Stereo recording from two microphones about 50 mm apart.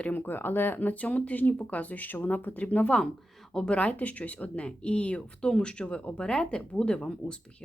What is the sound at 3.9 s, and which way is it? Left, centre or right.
Speech, left.